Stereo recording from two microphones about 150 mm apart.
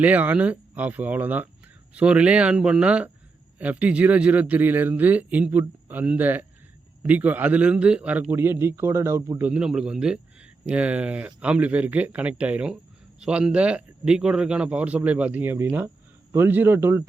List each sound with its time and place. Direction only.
0.0 s speech: 10° right (ahead or behind)